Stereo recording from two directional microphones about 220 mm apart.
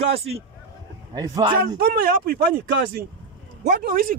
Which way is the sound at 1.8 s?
45° right (ahead or behind).